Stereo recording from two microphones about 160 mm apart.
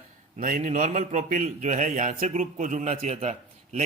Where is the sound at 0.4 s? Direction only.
55° right (ahead or behind).